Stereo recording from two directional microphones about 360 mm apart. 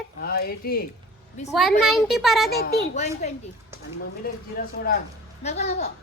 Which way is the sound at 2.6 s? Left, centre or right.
Left.